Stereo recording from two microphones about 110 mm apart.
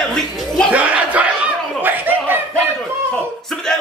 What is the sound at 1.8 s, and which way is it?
Snicker, 20° right (ahead or behind).